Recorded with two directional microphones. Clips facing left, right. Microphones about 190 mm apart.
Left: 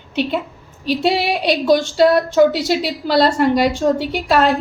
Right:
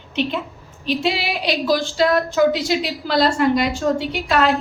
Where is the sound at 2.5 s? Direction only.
Centre (ahead or behind).